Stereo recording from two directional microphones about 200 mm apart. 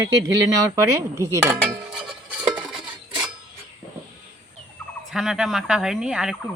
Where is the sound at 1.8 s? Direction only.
5° right (ahead or behind).